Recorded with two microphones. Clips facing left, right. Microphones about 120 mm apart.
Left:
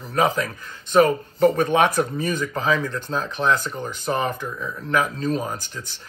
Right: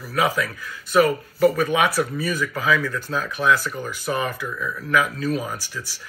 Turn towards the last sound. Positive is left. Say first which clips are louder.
# right 1 dB
turn(degrees=35)  # may be behind; listen again after turning